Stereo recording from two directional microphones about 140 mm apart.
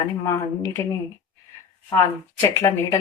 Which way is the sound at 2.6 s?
20° left (ahead or behind).